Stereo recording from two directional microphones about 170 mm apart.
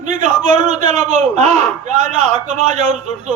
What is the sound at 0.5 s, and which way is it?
Speech, 40° right (ahead or behind).